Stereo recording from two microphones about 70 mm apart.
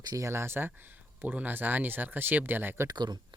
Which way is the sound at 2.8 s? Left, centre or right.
Right.